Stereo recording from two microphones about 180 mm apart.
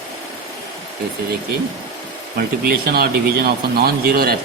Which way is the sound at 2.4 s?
55° right (ahead or behind).